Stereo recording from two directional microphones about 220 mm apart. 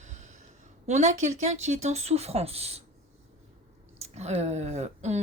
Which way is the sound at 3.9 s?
30° right (ahead or behind).